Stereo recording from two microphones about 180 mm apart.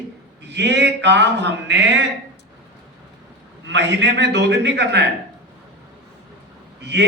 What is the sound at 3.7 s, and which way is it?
A man's voice, 75° right (ahead or behind).